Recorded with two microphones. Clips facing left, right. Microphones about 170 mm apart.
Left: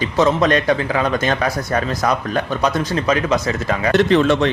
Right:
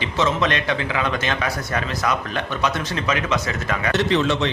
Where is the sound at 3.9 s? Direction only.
55° left (ahead or behind).